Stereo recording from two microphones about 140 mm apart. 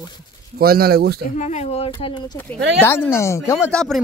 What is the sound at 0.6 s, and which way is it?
Speech, 90° right.